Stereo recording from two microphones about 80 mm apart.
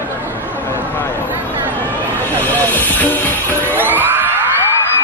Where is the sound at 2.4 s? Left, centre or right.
Left.